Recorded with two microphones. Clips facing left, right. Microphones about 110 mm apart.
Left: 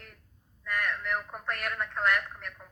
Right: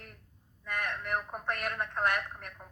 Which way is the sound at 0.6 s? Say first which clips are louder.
Left 3 dB; 20° right (ahead or behind).